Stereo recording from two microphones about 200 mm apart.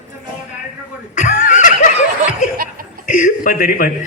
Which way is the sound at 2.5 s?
45° right (ahead or behind).